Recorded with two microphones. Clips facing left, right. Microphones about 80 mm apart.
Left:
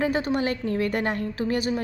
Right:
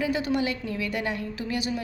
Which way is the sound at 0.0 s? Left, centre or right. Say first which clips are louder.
Left 2 dB; left.